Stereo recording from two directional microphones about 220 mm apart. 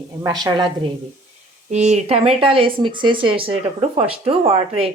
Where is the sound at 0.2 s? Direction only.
20° right (ahead or behind).